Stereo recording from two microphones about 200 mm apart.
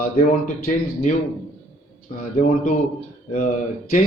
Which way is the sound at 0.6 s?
40° left (ahead or behind).